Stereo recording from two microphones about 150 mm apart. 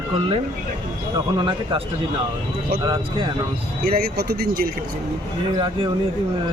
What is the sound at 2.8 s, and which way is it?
Speech, 30° right (ahead or behind).